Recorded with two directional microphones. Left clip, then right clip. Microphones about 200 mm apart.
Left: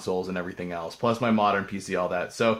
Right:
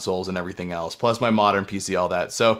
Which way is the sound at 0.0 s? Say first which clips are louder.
Right 3 dB; 45° right (ahead or behind).